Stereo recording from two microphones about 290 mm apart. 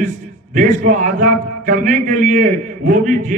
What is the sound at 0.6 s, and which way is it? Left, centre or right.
A man's voice, right.